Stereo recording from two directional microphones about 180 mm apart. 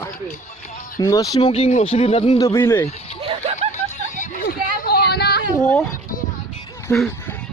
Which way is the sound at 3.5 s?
40° left (ahead or behind).